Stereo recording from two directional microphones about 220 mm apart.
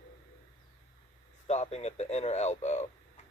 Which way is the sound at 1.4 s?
30° left (ahead or behind).